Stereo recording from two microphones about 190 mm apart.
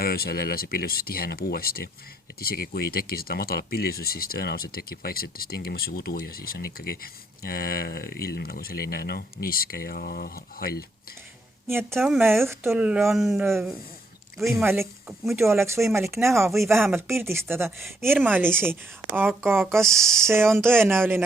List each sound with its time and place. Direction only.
0.0 s speech: 55° left (ahead or behind)
11.7 s a woman's voice: 10° right (ahead or behind)
15.4 s a woman's voice: 15° right (ahead or behind)
20.0 s speech: 5° left (ahead or behind)
20.2 s a woman's voice: 15° right (ahead or behind)